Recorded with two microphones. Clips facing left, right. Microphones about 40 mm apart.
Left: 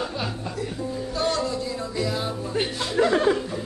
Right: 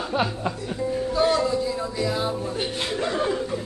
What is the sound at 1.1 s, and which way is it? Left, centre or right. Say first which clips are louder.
Music: right 4 dB; centre.